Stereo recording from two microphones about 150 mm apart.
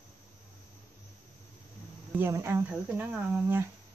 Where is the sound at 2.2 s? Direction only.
15° right (ahead or behind).